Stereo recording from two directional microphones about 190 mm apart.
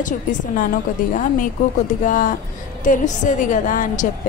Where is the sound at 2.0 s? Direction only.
45° left (ahead or behind).